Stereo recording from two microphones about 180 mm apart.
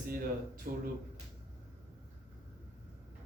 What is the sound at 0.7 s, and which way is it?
Speech, 50° right (ahead or behind).